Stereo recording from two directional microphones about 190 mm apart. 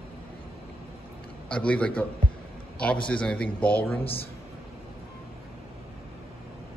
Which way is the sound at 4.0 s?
30° left (ahead or behind).